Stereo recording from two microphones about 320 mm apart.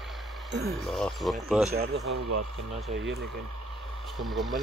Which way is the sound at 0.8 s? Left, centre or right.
Centre.